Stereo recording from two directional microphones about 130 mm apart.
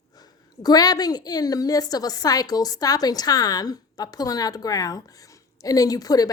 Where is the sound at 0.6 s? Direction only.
30° left (ahead or behind).